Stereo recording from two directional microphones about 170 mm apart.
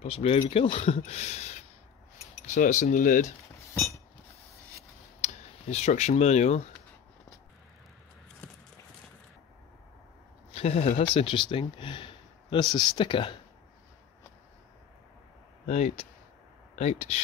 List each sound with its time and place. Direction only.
0.0 s speech: 35° left (ahead or behind)
5.2 s speech: 40° left (ahead or behind)
10.5 s speech: 35° left (ahead or behind)
15.6 s speech: 40° left (ahead or behind)